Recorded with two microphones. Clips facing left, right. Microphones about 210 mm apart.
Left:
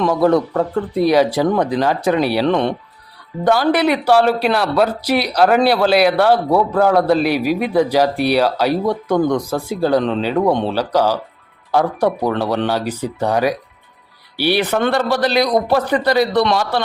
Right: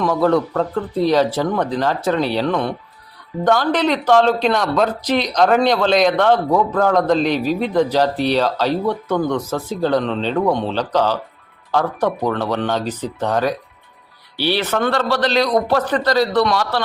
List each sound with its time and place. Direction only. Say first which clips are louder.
0.1 s speech: left 2 dB; 10° left (ahead or behind)
2.5 s speech: left 4 dB; 25° left (ahead or behind)
3.4 s speech: left 2 dB; 10° left (ahead or behind)